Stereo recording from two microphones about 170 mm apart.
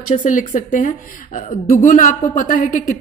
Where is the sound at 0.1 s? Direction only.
50° left (ahead or behind).